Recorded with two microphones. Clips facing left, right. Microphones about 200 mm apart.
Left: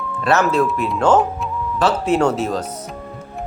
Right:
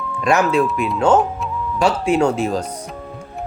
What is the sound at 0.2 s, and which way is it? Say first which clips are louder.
Speech: right 1 dB; 15° right (ahead or behind).